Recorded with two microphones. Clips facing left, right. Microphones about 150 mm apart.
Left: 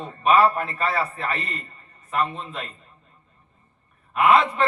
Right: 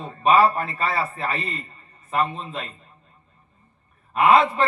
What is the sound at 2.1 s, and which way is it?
Speech, 35° right (ahead or behind).